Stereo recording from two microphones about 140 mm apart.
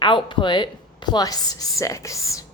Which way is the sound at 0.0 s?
35° left (ahead or behind).